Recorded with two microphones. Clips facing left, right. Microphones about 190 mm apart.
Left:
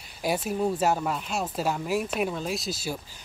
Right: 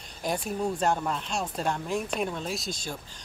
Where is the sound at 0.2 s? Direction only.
5° left (ahead or behind).